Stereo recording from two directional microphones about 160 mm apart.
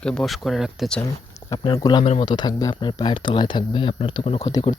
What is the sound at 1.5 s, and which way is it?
Speech, 25° left (ahead or behind).